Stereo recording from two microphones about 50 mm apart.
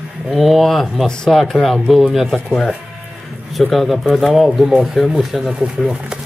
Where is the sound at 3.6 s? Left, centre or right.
Centre.